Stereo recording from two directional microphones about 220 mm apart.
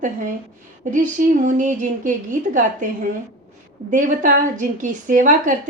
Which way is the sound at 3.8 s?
35° right (ahead or behind).